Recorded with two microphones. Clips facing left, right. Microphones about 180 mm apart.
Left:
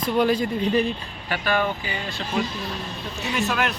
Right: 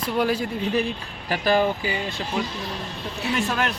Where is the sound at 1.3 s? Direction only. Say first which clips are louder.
Right 3 dB; 35° right (ahead or behind).